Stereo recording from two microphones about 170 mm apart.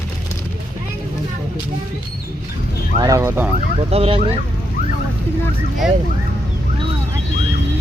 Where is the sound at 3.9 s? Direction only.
35° right (ahead or behind).